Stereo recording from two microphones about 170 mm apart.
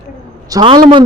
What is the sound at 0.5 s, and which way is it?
Speech, 30° right (ahead or behind).